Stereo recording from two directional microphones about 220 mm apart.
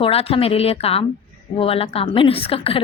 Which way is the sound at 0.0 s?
25° left (ahead or behind).